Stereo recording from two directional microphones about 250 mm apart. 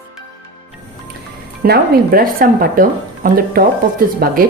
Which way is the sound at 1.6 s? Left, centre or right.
Right.